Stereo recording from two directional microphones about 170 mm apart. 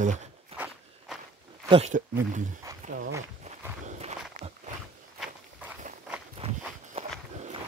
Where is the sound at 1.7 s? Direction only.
45° right (ahead or behind).